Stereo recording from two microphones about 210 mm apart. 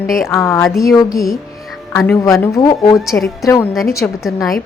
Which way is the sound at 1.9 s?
5° left (ahead or behind).